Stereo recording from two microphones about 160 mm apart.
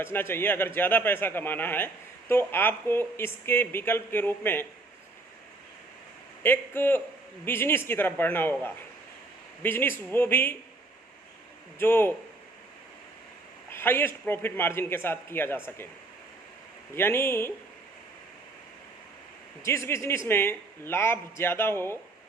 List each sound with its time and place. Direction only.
0.0 s a man's voice: 15° left (ahead or behind)
6.4 s a man's voice: 15° left (ahead or behind)
11.8 s a man's voice: 15° left (ahead or behind)
13.7 s a man's voice: 15° left (ahead or behind)
16.9 s a man's voice: 15° left (ahead or behind)
19.6 s a man's voice: 15° left (ahead or behind)